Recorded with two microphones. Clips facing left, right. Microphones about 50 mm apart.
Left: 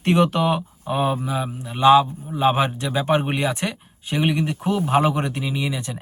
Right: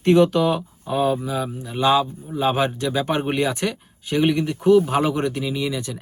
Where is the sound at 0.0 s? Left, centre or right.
Left.